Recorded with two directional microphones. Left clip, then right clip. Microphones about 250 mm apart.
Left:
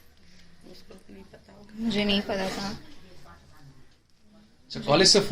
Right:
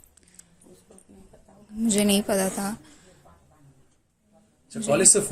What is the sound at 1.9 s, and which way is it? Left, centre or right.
Speech, right.